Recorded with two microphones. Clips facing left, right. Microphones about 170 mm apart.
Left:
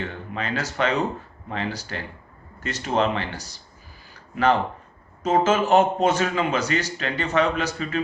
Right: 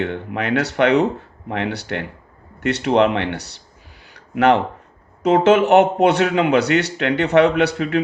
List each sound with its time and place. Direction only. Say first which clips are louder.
0.0 s speech: right 7 dB; 70° right (ahead or behind)
4.0 s a sound: right 5 dB; 75° right (ahead or behind)
5.2 s speech: right 6 dB; 70° right (ahead or behind)